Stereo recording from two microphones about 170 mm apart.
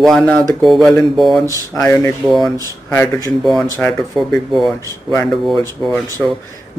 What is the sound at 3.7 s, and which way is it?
Speech, 10° left (ahead or behind).